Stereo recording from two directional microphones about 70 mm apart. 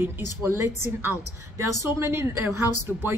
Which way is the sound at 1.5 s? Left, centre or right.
Right.